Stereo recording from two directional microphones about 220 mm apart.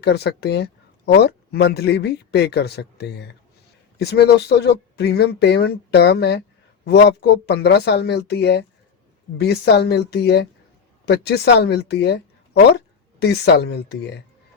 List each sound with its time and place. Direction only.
0.0 s speech: 50° left (ahead or behind)
13.2 s speech: 50° left (ahead or behind)